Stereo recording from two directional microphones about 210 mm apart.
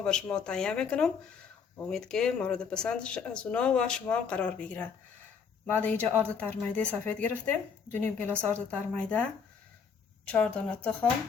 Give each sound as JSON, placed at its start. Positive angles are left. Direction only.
{"t": 0.0, "sound": "speech", "side_deg": 5}
{"t": 10.3, "sound": "speech", "side_deg": 5}